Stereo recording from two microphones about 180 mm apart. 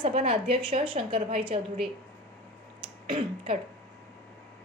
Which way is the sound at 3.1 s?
30° right (ahead or behind).